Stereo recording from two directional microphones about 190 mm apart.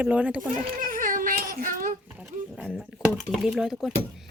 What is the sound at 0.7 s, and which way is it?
Baby cry, 45° right (ahead or behind).